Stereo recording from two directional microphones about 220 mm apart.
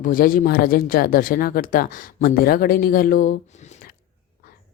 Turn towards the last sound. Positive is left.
turn(degrees=35)  # may be behind; listen again after turning